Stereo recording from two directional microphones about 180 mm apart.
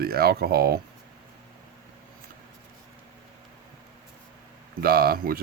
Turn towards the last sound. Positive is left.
turn(degrees=-55)  # may be behind; listen again after turning